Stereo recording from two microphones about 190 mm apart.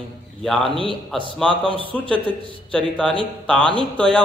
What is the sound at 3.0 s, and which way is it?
Speech, 5° left (ahead or behind).